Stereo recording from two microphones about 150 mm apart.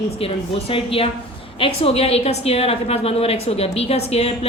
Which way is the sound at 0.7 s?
40° left (ahead or behind).